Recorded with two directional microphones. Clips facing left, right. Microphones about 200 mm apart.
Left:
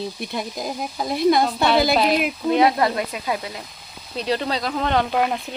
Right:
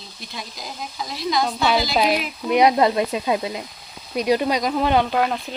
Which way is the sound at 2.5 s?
20° right (ahead or behind).